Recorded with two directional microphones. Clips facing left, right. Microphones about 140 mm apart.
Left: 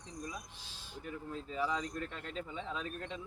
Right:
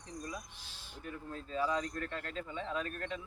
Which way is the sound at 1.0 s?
15° left (ahead or behind).